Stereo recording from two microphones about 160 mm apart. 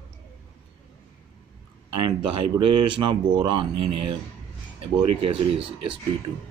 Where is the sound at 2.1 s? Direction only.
30° right (ahead or behind).